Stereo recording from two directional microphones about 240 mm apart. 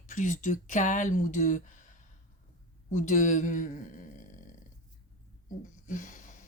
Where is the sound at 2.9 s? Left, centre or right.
Left.